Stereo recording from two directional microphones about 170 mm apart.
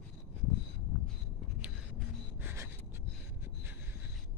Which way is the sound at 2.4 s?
15° right (ahead or behind).